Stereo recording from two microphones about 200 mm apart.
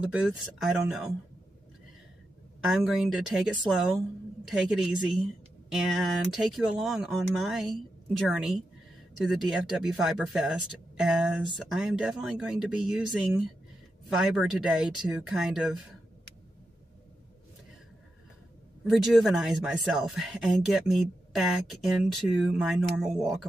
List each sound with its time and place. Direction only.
0.0 s speech: 5° right (ahead or behind)
2.6 s speech: centre (ahead or behind)
18.9 s speech: centre (ahead or behind)